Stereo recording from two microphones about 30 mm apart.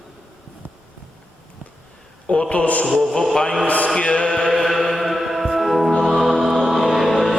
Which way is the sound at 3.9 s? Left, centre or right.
Left.